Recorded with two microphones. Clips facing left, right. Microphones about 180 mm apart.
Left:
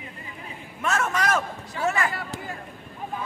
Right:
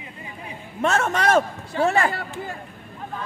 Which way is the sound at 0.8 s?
30° right (ahead or behind).